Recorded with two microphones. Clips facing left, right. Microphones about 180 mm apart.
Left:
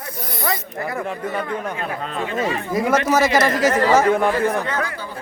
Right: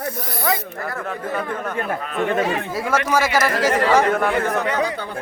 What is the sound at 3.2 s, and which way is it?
Speech, 10° right (ahead or behind).